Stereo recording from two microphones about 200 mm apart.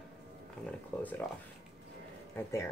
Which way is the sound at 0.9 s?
5° left (ahead or behind).